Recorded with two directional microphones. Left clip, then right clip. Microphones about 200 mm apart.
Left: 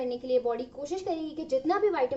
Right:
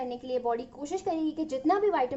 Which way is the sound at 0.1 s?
45° right (ahead or behind).